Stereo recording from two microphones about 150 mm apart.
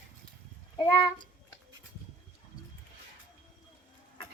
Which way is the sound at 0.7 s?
25° left (ahead or behind).